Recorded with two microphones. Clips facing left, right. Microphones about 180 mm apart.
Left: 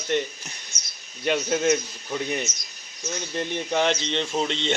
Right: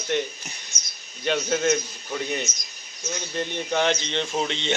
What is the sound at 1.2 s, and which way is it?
Speech, 5° left (ahead or behind).